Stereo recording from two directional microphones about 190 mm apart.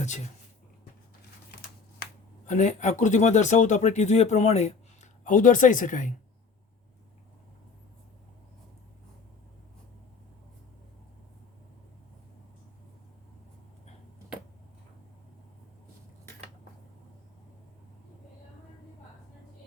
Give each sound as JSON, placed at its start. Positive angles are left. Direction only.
{"t": 2.5, "sound": "speech", "side_deg": 40}